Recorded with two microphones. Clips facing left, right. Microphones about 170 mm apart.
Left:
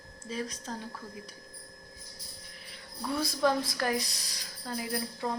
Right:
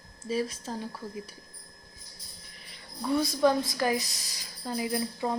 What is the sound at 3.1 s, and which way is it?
A woman's voice, centre (ahead or behind).